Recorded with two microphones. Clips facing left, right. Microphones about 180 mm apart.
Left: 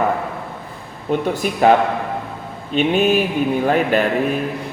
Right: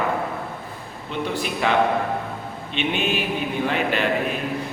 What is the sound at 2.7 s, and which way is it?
A man's voice, 40° left (ahead or behind).